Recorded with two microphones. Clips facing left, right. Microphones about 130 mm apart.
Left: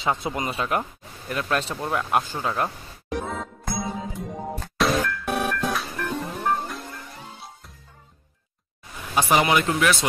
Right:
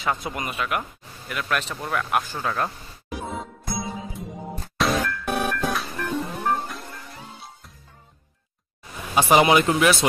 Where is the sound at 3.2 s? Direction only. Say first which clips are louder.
Left 1 dB; 55° left (ahead or behind).